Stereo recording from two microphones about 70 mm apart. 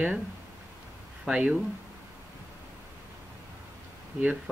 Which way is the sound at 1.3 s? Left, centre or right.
Centre.